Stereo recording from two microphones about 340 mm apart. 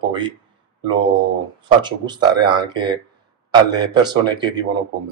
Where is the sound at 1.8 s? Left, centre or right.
Centre.